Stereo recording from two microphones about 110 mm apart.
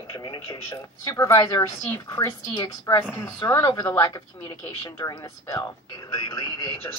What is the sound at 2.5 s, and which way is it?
Speech, 40° left (ahead or behind).